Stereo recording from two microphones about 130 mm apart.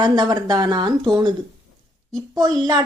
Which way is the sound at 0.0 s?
30° right (ahead or behind).